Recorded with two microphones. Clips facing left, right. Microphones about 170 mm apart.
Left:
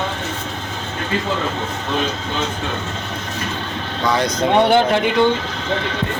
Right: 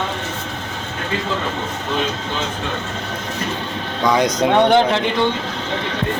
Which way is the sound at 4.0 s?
15° right (ahead or behind).